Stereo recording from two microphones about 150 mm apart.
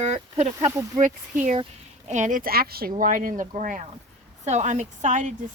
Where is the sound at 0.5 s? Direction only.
20° right (ahead or behind).